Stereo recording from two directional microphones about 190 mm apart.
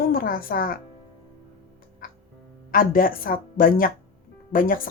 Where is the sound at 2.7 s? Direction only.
50° left (ahead or behind).